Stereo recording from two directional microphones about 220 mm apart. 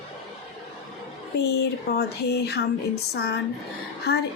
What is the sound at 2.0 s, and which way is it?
Speech, 50° left (ahead or behind).